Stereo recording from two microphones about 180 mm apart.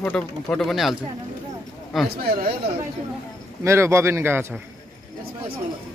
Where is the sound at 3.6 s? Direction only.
15° right (ahead or behind).